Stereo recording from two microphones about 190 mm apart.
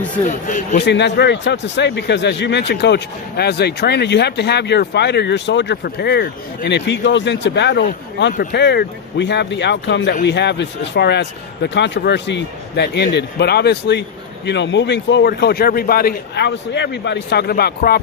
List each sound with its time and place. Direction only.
0.3 s a man's voice: 40° left (ahead or behind)
0.8 s speech: 65° left (ahead or behind)